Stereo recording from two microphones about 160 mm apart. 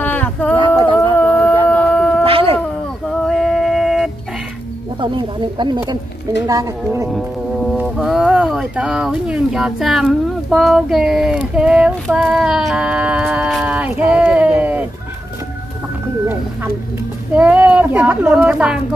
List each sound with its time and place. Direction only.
0.0 s a sound: 10° left (ahead or behind)
2.2 s howl: 35° right (ahead or behind)
3.1 s music: centre (ahead or behind)
5.0 s a woman's voice: 30° right (ahead or behind)
7.1 s insect: centre (ahead or behind)
7.7 s speech: 5° right (ahead or behind)
17.4 s a child's voice: 10° right (ahead or behind)